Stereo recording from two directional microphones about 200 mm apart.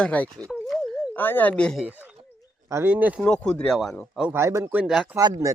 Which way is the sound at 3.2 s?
5° left (ahead or behind).